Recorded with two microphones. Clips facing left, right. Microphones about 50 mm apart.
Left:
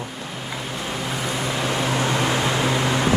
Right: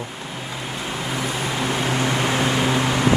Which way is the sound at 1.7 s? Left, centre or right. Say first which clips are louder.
Even; right.